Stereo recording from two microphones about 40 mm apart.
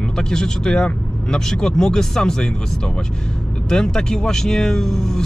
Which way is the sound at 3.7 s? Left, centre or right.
Centre.